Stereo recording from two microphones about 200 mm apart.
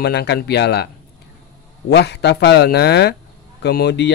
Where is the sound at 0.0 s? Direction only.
55° left (ahead or behind).